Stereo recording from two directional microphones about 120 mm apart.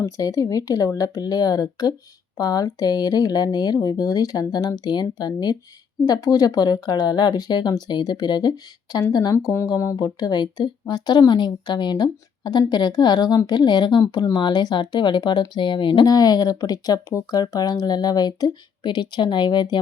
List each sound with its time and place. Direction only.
0.0 s speech: 30° left (ahead or behind)
9.3 s speech: 25° left (ahead or behind); by 19.8 s 40° left (ahead or behind)